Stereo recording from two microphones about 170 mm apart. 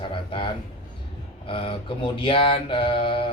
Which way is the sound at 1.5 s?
30° left (ahead or behind).